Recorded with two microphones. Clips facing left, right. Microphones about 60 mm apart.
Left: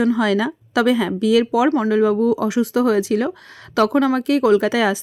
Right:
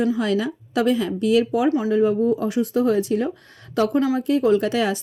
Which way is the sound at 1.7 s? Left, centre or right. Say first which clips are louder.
Left 2 dB; left.